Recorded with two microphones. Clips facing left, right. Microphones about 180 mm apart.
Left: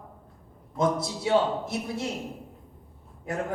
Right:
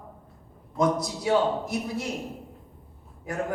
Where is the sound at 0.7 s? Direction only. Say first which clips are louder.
Right 1 dB; 25° left (ahead or behind).